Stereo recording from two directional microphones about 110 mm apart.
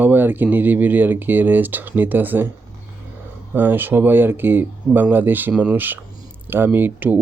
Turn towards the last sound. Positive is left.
turn(degrees=-15)  # may be behind; listen again after turning